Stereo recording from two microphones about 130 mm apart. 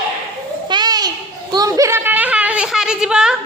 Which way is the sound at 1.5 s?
25° right (ahead or behind).